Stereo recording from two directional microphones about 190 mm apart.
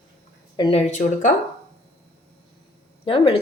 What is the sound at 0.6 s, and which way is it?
Speech, 30° left (ahead or behind).